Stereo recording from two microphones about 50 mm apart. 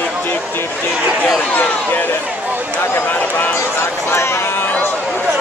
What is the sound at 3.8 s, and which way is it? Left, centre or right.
Speech, left.